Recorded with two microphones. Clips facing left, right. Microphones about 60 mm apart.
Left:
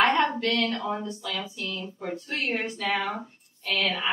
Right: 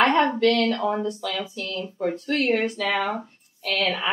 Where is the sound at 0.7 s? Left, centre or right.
Right.